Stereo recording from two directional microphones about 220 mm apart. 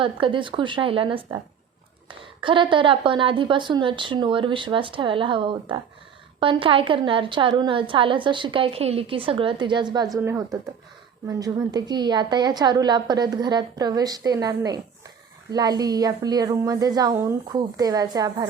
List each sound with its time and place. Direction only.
0.0 s a woman's voice: 20° right (ahead or behind)